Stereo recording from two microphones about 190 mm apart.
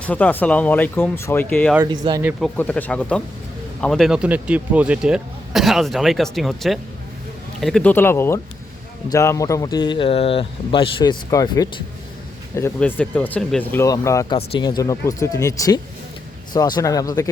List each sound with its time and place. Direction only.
0.0 s speech: 10° left (ahead or behind)
1.9 s speech: 25° right (ahead or behind)
2.6 s speech: 10° left (ahead or behind)